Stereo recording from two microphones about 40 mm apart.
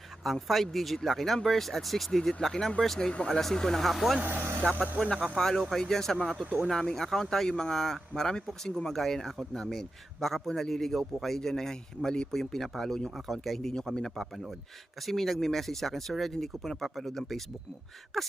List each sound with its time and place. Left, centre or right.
0.3 s a man's voice: centre
4.2 s speech: right
4.7 s speech: right
5.4 s a man's voice: centre